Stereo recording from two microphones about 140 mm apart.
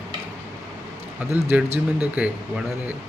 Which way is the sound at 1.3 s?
15° right (ahead or behind).